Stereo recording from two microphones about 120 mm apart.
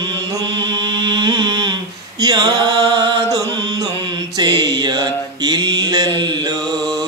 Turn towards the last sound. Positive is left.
turn(degrees=-35)  # may be behind; listen again after turning